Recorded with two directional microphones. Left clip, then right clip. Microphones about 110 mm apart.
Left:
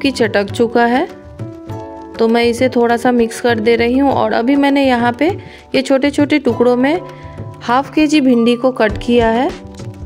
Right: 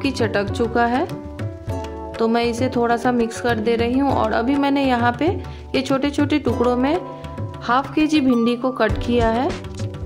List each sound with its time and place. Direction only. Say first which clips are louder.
0.0 s speech: left 7 dB; 50° left (ahead or behind)
2.1 s speech: left 7 dB; 45° left (ahead or behind)